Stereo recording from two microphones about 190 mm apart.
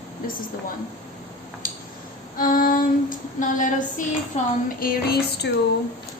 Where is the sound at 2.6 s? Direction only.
50° left (ahead or behind).